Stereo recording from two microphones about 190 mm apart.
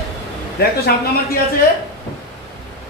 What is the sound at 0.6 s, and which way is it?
Speech, 55° left (ahead or behind).